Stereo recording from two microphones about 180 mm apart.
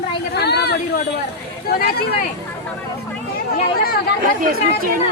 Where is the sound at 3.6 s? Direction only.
55° left (ahead or behind).